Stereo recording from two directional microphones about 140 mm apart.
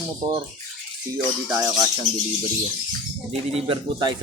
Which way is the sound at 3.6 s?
40° right (ahead or behind).